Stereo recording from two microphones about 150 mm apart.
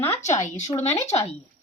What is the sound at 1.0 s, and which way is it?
Speech, 50° left (ahead or behind).